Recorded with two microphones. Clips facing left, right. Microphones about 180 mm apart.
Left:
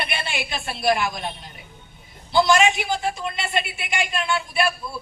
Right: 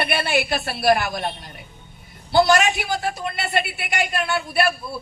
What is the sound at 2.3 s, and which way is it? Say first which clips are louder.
A man's voice: right 1 dB; 50° right (ahead or behind).